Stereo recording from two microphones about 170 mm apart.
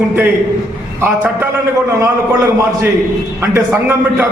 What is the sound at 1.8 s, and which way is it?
Speech, 15° right (ahead or behind).